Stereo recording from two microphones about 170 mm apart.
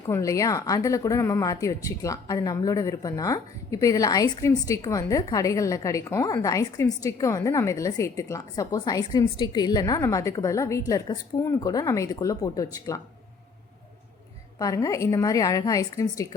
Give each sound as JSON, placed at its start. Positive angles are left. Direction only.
{"t": 0.1, "sound": "a woman's voice", "side_deg": 20}
{"t": 14.6, "sound": "a woman's voice", "side_deg": 20}